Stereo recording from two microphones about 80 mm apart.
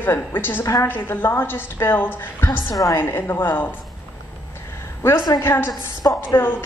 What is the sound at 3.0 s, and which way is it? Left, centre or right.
Speech, left.